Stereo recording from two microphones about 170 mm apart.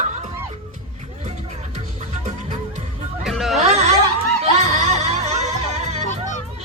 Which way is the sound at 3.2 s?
Centre (ahead or behind).